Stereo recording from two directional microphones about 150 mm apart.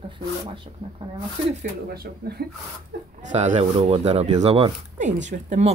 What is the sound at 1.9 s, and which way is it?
Speech, 90° right.